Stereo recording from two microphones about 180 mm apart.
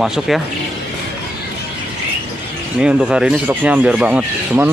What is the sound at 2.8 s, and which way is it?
Speech, 5° right (ahead or behind).